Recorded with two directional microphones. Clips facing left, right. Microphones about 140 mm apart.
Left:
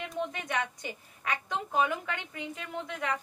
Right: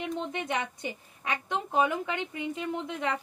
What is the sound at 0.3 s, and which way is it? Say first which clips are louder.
Speech: right 2 dB; 25° right (ahead or behind).